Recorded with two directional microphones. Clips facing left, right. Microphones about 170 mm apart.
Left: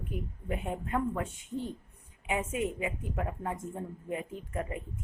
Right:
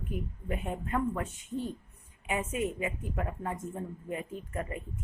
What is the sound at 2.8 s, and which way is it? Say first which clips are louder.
Speech: even; 10° left (ahead or behind).